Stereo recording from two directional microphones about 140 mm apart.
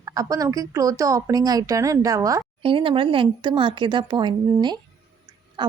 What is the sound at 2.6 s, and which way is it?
Speech, 40° right (ahead or behind).